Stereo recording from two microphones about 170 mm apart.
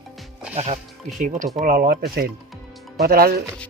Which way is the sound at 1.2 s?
50° right (ahead or behind).